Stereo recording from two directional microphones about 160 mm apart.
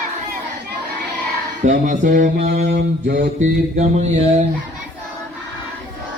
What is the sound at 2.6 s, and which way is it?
Mantra, 90° right.